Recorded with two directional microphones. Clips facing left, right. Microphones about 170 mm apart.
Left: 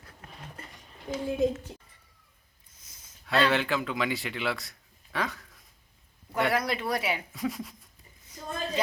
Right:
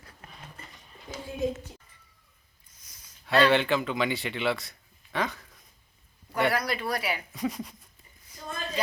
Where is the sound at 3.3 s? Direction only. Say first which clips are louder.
Right 3 dB; centre (ahead or behind).